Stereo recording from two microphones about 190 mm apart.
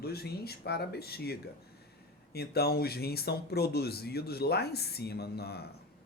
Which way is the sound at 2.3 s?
55° left (ahead or behind).